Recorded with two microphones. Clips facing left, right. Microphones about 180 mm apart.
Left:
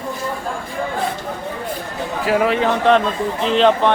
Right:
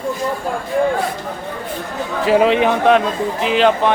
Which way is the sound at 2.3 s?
20° right (ahead or behind).